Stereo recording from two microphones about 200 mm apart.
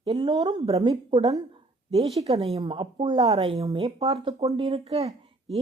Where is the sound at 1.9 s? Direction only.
30° right (ahead or behind).